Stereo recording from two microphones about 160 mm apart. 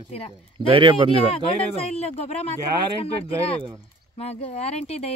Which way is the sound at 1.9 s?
40° left (ahead or behind).